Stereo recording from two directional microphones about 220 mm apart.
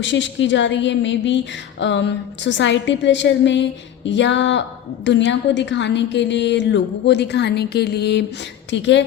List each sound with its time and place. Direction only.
0.0 s a woman's voice: 55° left (ahead or behind)